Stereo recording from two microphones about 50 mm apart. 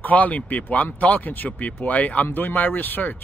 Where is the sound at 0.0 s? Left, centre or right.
Left.